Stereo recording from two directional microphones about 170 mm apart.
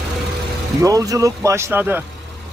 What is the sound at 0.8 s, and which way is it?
Speech, 20° right (ahead or behind).